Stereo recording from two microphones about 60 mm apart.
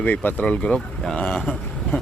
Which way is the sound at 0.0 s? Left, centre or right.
Left.